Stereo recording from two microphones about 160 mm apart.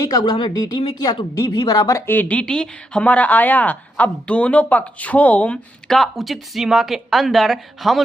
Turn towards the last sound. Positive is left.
turn(degrees=0)  # may be behind; listen again after turning